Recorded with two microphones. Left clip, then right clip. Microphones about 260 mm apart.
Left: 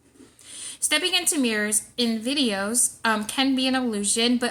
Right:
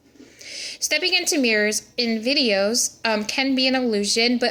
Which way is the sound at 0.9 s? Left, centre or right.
Left.